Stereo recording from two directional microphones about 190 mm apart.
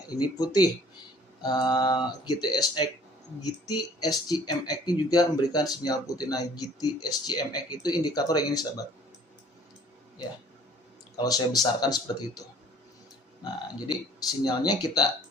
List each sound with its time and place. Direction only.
0.1 s speech: 20° left (ahead or behind)
4.0 s speech: 20° left (ahead or behind)
11.2 s speech: 20° left (ahead or behind)
13.4 s speech: 20° left (ahead or behind)